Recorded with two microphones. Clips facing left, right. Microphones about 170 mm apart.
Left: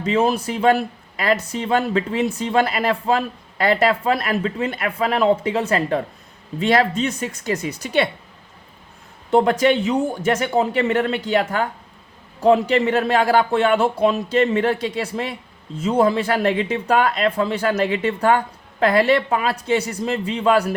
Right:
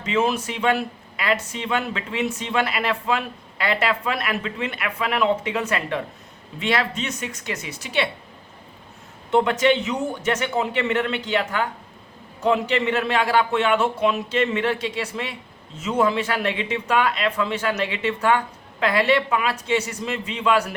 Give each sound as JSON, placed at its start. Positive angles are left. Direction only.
{"t": 0.0, "sound": "speech", "side_deg": 35}
{"t": 9.3, "sound": "speech", "side_deg": 35}